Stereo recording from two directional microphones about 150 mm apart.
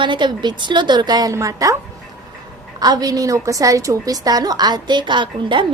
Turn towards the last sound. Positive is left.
turn(degrees=-30)  # may be behind; listen again after turning